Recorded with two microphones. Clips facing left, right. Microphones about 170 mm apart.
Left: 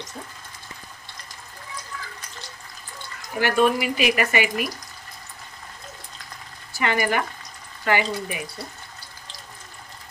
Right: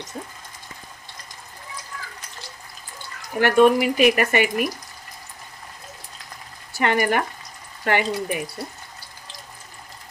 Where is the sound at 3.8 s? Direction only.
50° right (ahead or behind).